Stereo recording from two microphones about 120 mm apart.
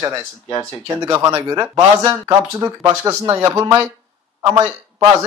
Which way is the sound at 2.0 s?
35° right (ahead or behind).